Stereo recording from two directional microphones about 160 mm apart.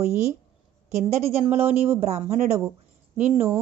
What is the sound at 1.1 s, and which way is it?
A woman's voice, 40° right (ahead or behind).